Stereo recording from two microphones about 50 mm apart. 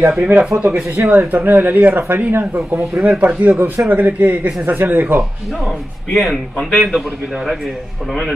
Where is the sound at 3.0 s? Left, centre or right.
Right.